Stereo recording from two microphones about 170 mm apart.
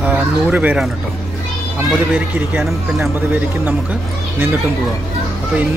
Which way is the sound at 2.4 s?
10° right (ahead or behind).